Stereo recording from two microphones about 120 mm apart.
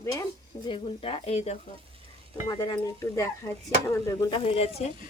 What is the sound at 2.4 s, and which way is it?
Speech, 35° left (ahead or behind).